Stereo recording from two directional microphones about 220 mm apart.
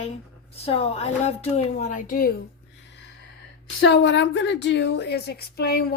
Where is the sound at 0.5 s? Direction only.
25° left (ahead or behind).